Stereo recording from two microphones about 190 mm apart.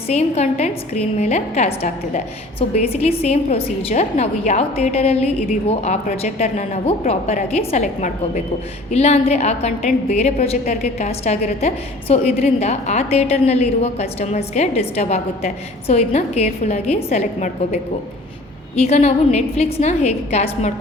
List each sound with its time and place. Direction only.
0.1 s a woman's voice: 35° left (ahead or behind)
18.8 s a woman's voice: 35° left (ahead or behind)